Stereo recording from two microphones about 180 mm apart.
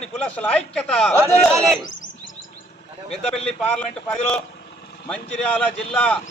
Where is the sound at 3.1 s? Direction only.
5° left (ahead or behind).